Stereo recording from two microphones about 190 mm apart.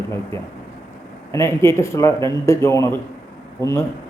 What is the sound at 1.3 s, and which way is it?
A man's voice, 15° left (ahead or behind).